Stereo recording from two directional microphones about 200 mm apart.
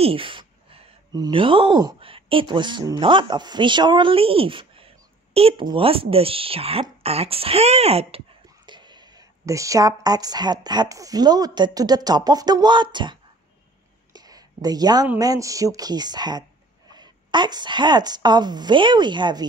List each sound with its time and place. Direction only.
0.0 s a woman's voice: 25° right (ahead or behind)
14.1 s a sound: 20° right (ahead or behind)
15.0 s a woman's voice: 15° right (ahead or behind)